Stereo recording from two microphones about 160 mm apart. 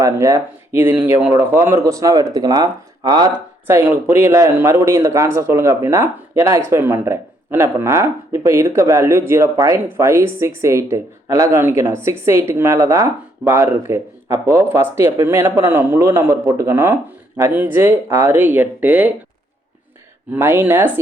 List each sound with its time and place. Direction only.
0.0 s a man's voice: 20° right (ahead or behind)
20.3 s a man's voice: 15° right (ahead or behind)